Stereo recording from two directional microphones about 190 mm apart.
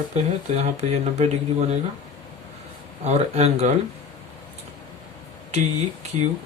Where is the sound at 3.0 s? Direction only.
35° right (ahead or behind).